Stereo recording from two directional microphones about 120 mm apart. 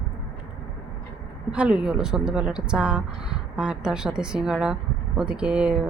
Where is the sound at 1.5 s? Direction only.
10° right (ahead or behind).